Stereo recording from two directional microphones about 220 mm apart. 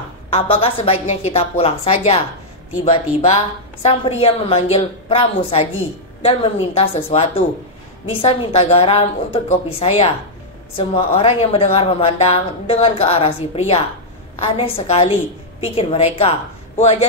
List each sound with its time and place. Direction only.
0.3 s speech: 25° left (ahead or behind)
11.1 s speech: 25° left (ahead or behind)